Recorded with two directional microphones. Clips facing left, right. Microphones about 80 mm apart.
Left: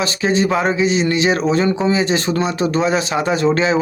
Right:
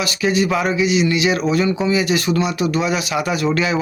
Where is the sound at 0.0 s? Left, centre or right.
Left.